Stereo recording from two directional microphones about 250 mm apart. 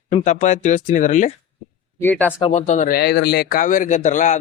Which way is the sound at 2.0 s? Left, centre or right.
Centre.